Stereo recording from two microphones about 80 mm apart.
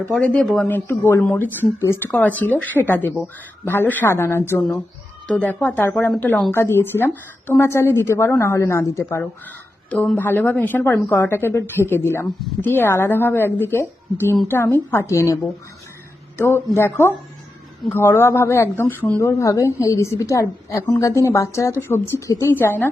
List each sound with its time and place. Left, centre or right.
0.0 s speech: centre
0.7 s speech: left
1.8 s a woman's voice: left
2.1 s speech: left
5.4 s speech: centre
6.1 s speech: centre
6.5 s a woman's voice: left
10.2 s a woman's voice: left
16.4 s a woman's voice: left
22.5 s speech: left